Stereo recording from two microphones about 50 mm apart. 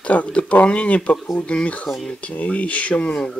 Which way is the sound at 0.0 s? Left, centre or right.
Left.